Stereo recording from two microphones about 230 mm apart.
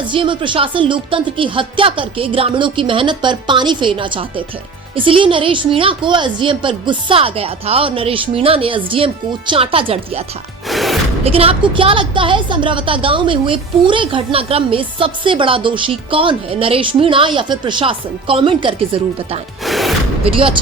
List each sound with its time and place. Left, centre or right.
0.1 s a woman's voice: right
10.7 s music: centre
11.2 s a woman's voice: right
19.6 s music: centre
20.2 s a woman's voice: right